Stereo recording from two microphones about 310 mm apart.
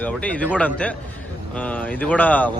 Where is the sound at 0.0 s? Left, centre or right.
Centre.